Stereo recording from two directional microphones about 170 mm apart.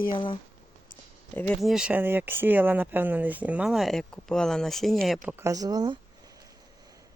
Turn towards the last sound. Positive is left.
turn(degrees=-25)  # may be behind; listen again after turning